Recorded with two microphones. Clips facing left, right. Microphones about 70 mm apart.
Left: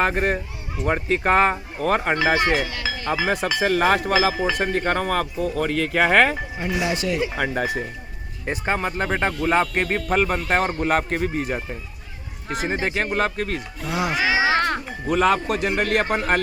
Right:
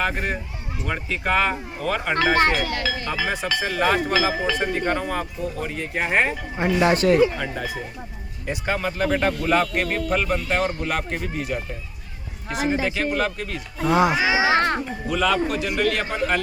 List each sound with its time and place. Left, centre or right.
0.0 s speech: left
2.4 s speech: right
3.1 s speech: left
6.8 s speech: right
7.3 s speech: left
8.4 s speech: left
13.8 s speech: right
15.0 s speech: left